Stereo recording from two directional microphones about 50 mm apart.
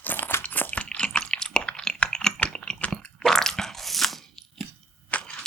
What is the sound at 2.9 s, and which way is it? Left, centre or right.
Crunch, centre.